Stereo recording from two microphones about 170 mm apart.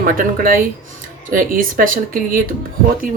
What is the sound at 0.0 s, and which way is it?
Speech, 55° right (ahead or behind).